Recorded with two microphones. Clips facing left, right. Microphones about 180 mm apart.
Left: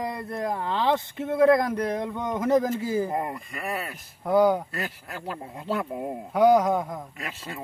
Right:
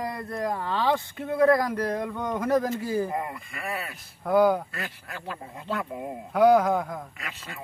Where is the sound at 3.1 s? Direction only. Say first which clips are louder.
Left 2 dB; 35° left (ahead or behind).